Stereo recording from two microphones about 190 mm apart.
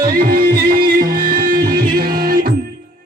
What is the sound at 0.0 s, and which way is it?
Music, 50° right (ahead or behind).